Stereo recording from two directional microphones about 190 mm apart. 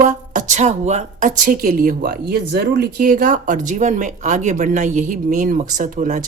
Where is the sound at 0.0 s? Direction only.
40° right (ahead or behind).